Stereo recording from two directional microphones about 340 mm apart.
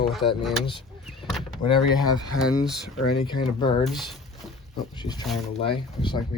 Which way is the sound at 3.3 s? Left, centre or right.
Centre.